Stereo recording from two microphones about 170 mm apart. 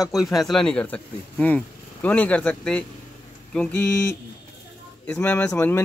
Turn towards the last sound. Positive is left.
turn(degrees=10)  # may be behind; listen again after turning